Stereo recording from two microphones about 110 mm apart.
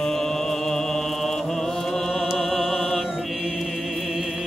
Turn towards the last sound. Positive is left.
turn(degrees=-5)  # may be behind; listen again after turning